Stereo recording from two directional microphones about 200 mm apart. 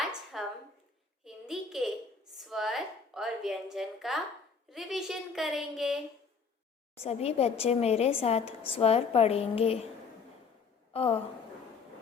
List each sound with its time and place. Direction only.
0.0 s a sound: centre (ahead or behind)
2.4 s a woman's voice: centre (ahead or behind)
6.9 s a woman's voice: 30° left (ahead or behind)
10.9 s a woman's voice: 30° left (ahead or behind)